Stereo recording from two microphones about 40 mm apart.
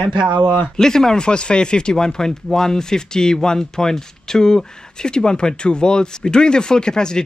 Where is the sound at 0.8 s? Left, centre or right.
Centre.